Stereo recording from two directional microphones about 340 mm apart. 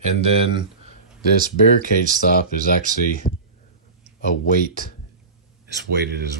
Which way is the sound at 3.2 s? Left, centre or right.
Centre.